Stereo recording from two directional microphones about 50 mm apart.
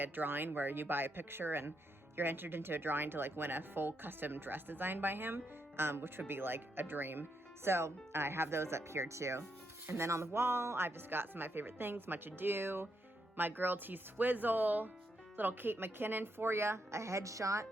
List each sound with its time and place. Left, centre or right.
0.0 s a woman's voice: right